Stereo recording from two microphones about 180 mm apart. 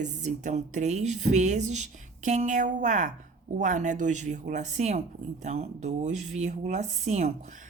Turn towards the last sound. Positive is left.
turn(degrees=-40)  # may be behind; listen again after turning